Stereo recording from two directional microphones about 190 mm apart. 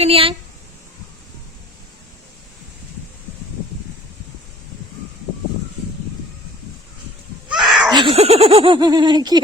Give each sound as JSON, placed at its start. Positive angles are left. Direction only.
{"t": 0.0, "sound": "speech", "side_deg": -30}
{"t": 7.5, "sound": "a sound", "side_deg": -5}
{"t": 7.9, "sound": "speech", "side_deg": -25}